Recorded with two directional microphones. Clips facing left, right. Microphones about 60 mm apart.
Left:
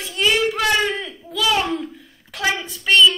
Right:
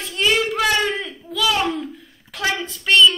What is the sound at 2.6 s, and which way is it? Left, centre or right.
Speech, centre.